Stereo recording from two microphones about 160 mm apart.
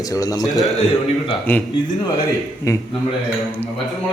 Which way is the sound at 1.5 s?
10° left (ahead or behind).